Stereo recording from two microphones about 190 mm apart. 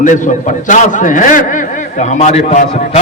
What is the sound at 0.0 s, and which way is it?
A man's voice, 40° left (ahead or behind).